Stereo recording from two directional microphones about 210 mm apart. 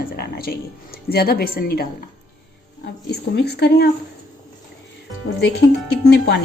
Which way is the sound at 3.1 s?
50° left (ahead or behind).